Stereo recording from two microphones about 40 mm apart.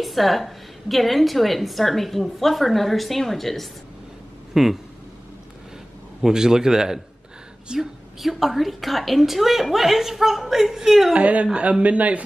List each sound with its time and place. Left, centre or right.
0.0 s a woman's voice: centre
4.6 s a man's voice: centre
6.2 s a man's voice: centre
8.2 s a woman's voice: centre
11.1 s a man's voice: right